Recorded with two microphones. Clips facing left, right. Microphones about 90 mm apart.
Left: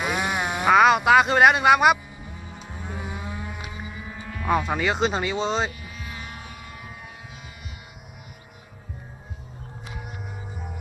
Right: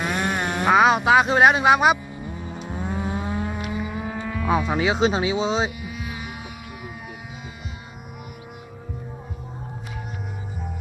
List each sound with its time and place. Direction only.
0.0 s speech: 5° left (ahead or behind)
2.6 s vehicle: 45° right (ahead or behind); by 4.4 s 70° right (ahead or behind)
4.4 s speech: 5° right (ahead or behind)
5.8 s music: 15° right (ahead or behind)